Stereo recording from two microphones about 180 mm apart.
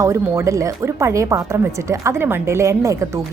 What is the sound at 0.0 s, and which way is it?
Speech, 15° right (ahead or behind).